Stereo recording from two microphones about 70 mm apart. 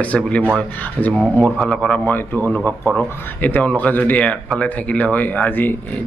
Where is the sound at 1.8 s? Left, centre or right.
Left.